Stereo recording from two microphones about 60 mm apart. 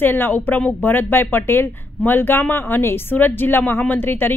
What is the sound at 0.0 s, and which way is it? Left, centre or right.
Speech, left.